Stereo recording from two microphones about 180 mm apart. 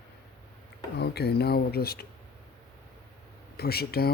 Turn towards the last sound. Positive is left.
turn(degrees=60)  # may be behind; listen again after turning